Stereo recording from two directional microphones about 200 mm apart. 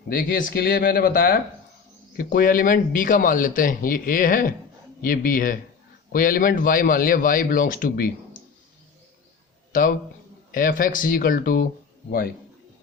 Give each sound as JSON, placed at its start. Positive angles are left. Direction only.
{"t": 0.1, "sound": "speech", "side_deg": 45}
{"t": 9.7, "sound": "speech", "side_deg": 45}